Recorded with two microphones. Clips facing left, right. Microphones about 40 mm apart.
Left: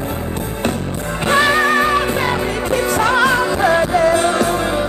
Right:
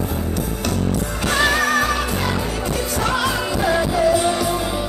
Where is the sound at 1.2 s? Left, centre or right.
Left.